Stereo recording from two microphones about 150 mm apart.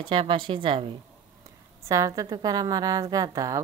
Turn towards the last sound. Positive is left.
turn(degrees=-25)  # may be behind; listen again after turning